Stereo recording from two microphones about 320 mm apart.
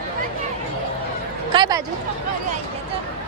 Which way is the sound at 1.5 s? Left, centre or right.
Centre.